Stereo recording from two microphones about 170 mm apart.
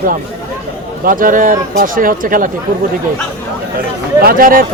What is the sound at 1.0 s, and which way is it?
Speech, 55° right (ahead or behind).